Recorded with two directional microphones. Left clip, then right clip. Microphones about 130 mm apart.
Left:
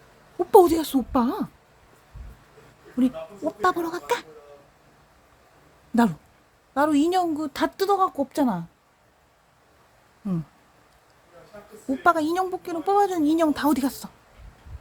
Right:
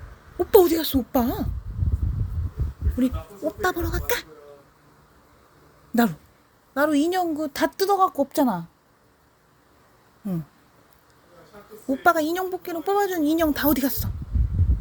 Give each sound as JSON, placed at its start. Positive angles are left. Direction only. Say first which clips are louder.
{"t": 0.5, "sound": "speech", "louder": "left 1 dB", "side_deg": 20}
{"t": 1.1, "sound": "speech", "louder": "left 1 dB", "side_deg": 5}
{"t": 3.6, "sound": "speech", "louder": "left 3 dB", "side_deg": 20}
{"t": 5.9, "sound": "a woman's voice", "louder": "even", "side_deg": 15}
{"t": 11.9, "sound": "speech", "louder": "right 1 dB", "side_deg": 5}